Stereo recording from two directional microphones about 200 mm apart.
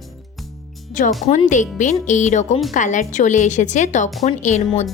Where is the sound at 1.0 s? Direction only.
40° left (ahead or behind).